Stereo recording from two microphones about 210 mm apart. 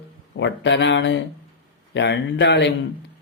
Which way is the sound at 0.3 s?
60° left (ahead or behind).